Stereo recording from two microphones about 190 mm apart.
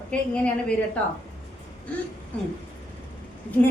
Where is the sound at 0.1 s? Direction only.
5° left (ahead or behind).